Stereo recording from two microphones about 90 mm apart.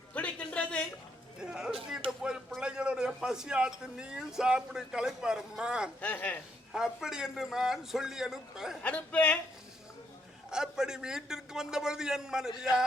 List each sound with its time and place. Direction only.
0.1 s a sound: 15° left (ahead or behind)
1.4 s music: 10° right (ahead or behind)
2.0 s a sound: 10° right (ahead or behind)
2.6 s a man's voice: 10° right (ahead or behind)
6.0 s a woman's voice: 15° left (ahead or behind)
6.7 s a man's voice: 5° right (ahead or behind)
8.8 s a woman's voice: 15° left (ahead or behind)
10.5 s a man's voice: 5° right (ahead or behind)